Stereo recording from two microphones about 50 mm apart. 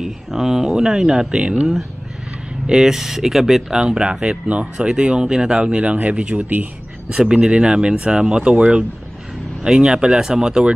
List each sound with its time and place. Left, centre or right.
0.0 s speech: centre
3.8 s speech: centre